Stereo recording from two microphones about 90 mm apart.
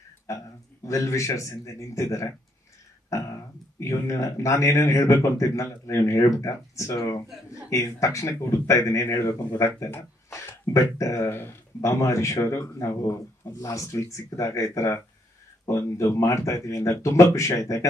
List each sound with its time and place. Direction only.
0.3 s speech: 35° left (ahead or behind)
3.1 s a sound: 35° left (ahead or behind)
3.8 s speech: 35° left (ahead or behind)